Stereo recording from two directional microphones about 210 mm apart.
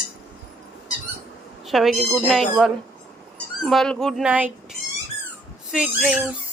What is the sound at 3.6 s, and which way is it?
Speech, centre (ahead or behind).